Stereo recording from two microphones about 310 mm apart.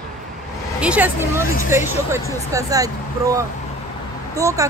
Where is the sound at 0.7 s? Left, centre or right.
Centre.